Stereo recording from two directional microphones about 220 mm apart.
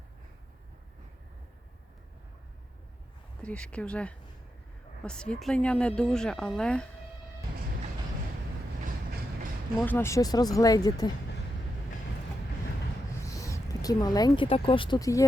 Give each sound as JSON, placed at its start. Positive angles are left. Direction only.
{"t": 3.4, "sound": "speech", "side_deg": 5}
{"t": 9.8, "sound": "speech", "side_deg": 10}
{"t": 13.4, "sound": "speech", "side_deg": 15}